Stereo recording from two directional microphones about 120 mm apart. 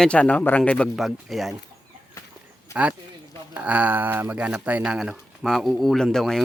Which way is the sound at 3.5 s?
10° right (ahead or behind).